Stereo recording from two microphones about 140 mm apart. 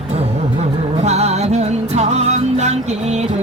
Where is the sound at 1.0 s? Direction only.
50° right (ahead or behind).